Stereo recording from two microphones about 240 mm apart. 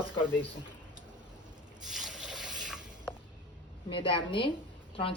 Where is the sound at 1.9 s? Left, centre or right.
Centre.